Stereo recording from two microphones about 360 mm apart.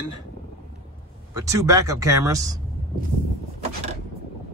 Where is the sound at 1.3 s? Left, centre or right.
Centre.